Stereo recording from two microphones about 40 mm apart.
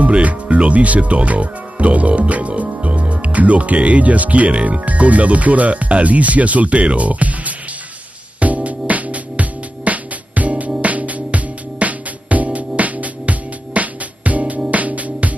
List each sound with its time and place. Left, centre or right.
0.0 s speech: right
8.4 s music: right